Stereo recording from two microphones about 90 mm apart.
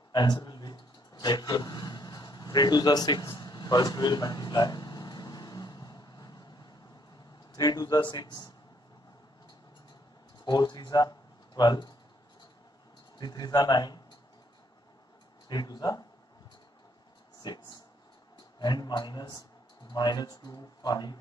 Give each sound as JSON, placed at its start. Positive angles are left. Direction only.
{"t": 0.1, "sound": "a sound", "side_deg": 50}
{"t": 7.5, "sound": "speech", "side_deg": 45}
{"t": 10.4, "sound": "speech", "side_deg": 50}
{"t": 13.2, "sound": "speech", "side_deg": 50}
{"t": 15.4, "sound": "speech", "side_deg": 50}
{"t": 17.4, "sound": "speech", "side_deg": 55}